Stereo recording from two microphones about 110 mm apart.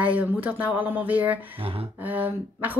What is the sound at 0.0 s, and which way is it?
Speech, 15° right (ahead or behind).